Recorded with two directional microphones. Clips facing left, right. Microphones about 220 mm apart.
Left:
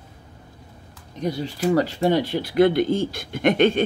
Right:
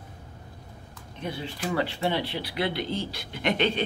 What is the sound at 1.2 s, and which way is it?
Speech, 40° left (ahead or behind).